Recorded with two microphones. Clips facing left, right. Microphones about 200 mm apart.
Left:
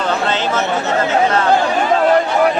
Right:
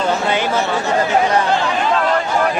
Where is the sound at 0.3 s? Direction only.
15° right (ahead or behind).